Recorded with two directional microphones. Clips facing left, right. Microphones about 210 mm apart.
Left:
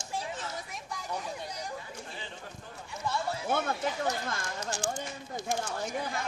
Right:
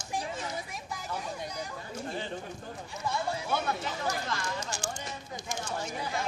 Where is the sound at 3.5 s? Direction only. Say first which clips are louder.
Left 2 dB; 50° left (ahead or behind).